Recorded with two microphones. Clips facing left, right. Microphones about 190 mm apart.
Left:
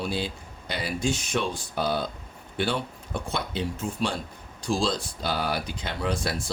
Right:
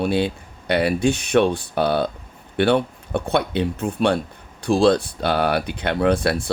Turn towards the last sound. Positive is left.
turn(degrees=-65)  # may be behind; listen again after turning